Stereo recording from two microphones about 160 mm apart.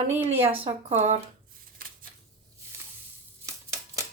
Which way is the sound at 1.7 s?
65° right (ahead or behind).